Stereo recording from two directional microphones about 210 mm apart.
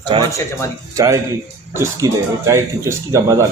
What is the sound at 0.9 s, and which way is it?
A man's voice, 15° right (ahead or behind).